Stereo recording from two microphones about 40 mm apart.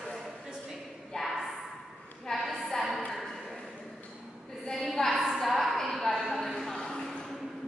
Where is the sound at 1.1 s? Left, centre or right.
Centre.